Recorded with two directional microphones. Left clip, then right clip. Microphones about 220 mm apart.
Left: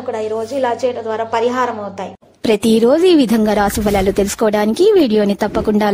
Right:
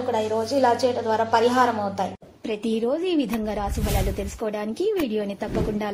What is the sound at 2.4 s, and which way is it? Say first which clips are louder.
Speech: left 13 dB; 55° left (ahead or behind).